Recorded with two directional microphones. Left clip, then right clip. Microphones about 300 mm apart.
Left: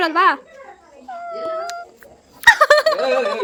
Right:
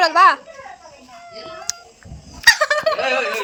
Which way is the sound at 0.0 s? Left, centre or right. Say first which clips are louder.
Right 3 dB; centre.